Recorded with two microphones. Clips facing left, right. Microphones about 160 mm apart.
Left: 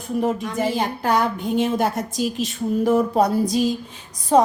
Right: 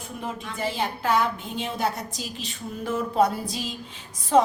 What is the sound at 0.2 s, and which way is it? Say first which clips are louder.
A woman's voice: left 9 dB; 45° left (ahead or behind).